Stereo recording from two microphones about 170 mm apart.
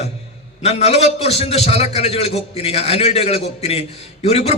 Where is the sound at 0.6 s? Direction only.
35° left (ahead or behind).